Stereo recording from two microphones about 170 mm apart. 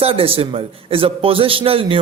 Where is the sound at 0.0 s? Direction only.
35° right (ahead or behind).